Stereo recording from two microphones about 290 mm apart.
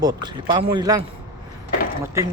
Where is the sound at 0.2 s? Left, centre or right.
Centre.